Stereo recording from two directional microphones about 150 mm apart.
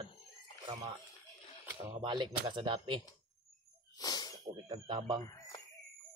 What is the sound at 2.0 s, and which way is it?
Speech, 35° right (ahead or behind).